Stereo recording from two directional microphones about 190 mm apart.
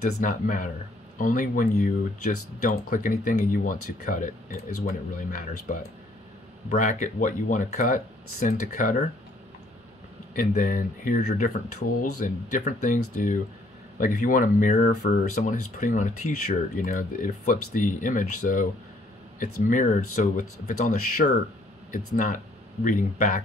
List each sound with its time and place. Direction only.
0.2 s speech: 45° left (ahead or behind)
10.3 s speech: 45° left (ahead or behind)